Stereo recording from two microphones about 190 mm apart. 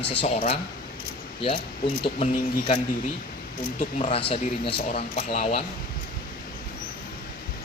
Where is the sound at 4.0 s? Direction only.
30° left (ahead or behind).